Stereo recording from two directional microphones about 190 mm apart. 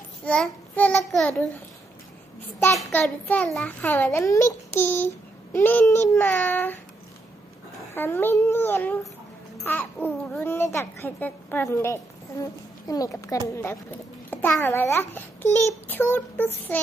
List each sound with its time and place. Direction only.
0.2 s a child's voice: 5° left (ahead or behind)
2.6 s a child's voice: 10° left (ahead or behind)
7.9 s a child's voice: 10° left (ahead or behind)